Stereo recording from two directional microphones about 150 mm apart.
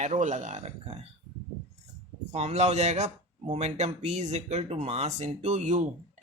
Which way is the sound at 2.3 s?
45° right (ahead or behind).